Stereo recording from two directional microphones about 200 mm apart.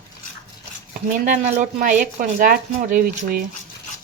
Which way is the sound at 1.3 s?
40° right (ahead or behind).